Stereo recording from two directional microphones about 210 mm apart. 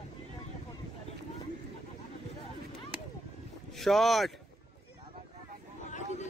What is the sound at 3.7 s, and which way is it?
Speech, centre (ahead or behind).